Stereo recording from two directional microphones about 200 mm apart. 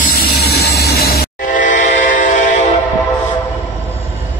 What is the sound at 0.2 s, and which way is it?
Train, 55° left (ahead or behind).